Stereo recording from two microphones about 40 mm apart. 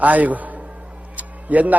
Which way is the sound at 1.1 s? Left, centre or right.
Right.